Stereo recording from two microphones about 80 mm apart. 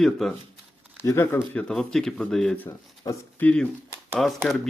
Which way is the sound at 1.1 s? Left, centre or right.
Left.